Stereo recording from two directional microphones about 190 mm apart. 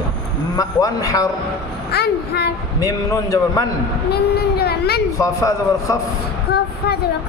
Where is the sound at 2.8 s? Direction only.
15° left (ahead or behind).